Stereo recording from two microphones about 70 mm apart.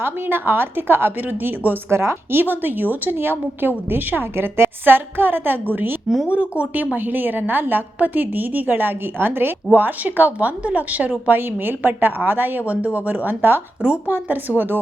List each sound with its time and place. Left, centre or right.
0.0 s a woman's voice: right
6.3 s a woman's voice: centre